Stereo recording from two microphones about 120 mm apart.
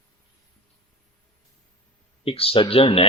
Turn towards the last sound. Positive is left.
turn(degrees=55)  # may be behind; listen again after turning